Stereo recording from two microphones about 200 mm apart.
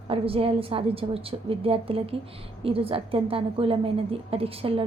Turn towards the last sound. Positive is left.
turn(degrees=-30)  # may be behind; listen again after turning